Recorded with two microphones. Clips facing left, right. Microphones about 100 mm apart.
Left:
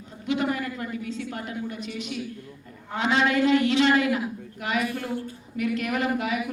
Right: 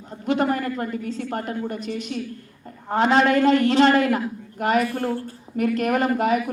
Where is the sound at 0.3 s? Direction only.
45° right (ahead or behind).